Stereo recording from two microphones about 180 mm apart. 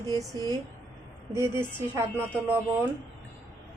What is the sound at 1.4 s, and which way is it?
Speech, 15° right (ahead or behind).